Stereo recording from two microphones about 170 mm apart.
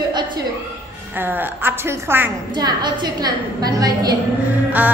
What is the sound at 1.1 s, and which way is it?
A woman's voice, 10° right (ahead or behind).